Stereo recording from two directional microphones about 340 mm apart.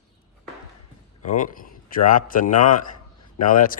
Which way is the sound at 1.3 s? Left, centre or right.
Left.